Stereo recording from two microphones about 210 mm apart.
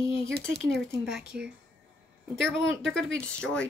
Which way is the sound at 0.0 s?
25° left (ahead or behind).